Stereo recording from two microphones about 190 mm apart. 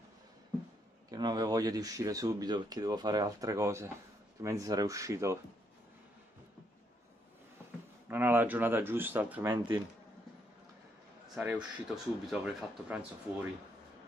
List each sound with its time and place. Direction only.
1.1 s speech: 20° right (ahead or behind)
8.1 s speech: 10° right (ahead or behind)
11.3 s speech: 5° right (ahead or behind)